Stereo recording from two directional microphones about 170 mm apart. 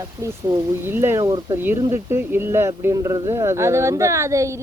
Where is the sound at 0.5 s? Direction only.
25° right (ahead or behind).